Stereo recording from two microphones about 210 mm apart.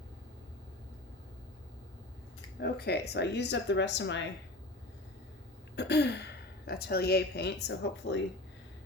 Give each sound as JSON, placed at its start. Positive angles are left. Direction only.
{"t": 2.6, "sound": "speech", "side_deg": 50}
{"t": 5.7, "sound": "speech", "side_deg": 55}